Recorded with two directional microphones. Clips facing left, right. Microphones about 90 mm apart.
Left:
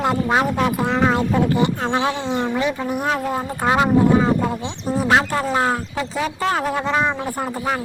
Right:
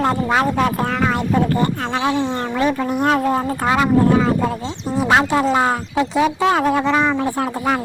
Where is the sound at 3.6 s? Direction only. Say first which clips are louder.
Even; 15° left (ahead or behind).